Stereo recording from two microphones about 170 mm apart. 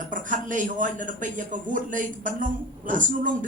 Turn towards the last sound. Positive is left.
turn(degrees=-50)  # may be behind; listen again after turning